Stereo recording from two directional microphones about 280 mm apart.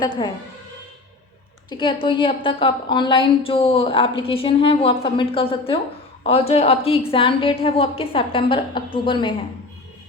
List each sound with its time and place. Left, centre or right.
1.7 s a woman's voice: centre